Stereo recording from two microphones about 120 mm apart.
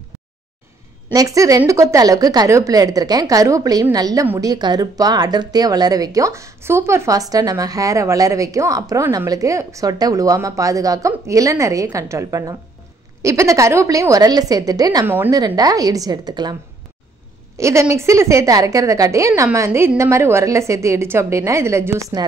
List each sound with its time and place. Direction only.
1.1 s a woman's voice: 30° right (ahead or behind)
15.0 s a woman's voice: 15° right (ahead or behind)
15.3 s a woman's voice: 30° right (ahead or behind)
17.6 s speech: 25° right (ahead or behind)